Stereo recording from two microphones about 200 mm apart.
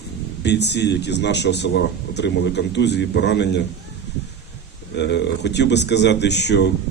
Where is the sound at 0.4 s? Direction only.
60° left (ahead or behind).